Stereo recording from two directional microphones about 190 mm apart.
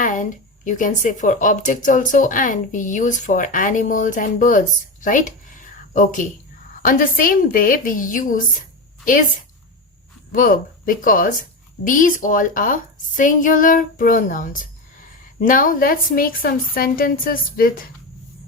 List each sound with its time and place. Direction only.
0.0 s a woman's voice: 45° left (ahead or behind)
6.8 s a woman's voice: 45° left (ahead or behind)